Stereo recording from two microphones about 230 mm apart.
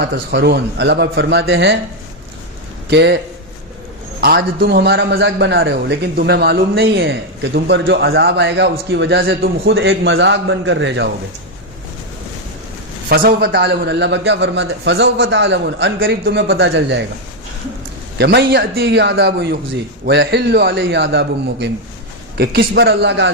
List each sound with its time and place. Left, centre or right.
0.0 s a man's voice: right
2.9 s a man's voice: right
4.2 s a man's voice: right
9.7 s a man's voice: right
13.1 s a man's voice: right
18.2 s a man's voice: right